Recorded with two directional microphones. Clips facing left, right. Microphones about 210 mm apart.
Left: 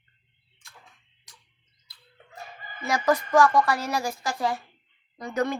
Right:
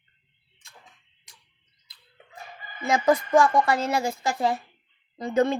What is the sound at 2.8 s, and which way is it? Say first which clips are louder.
A woman's voice: right 3 dB; 20° right (ahead or behind).